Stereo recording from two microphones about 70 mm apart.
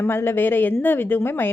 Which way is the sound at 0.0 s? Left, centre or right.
Left.